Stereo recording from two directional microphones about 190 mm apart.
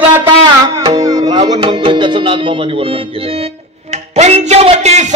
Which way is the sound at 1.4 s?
25° right (ahead or behind).